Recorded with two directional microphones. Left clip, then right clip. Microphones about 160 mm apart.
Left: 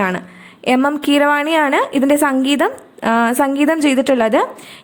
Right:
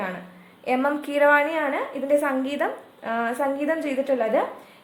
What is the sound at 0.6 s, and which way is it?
A woman's voice, 40° left (ahead or behind).